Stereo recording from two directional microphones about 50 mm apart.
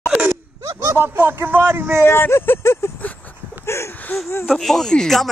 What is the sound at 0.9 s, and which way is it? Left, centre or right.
Speech, right.